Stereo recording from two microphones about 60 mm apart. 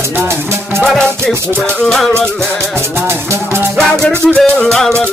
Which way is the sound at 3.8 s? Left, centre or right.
Centre.